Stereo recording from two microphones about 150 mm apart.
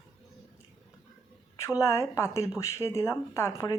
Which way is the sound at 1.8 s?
20° left (ahead or behind).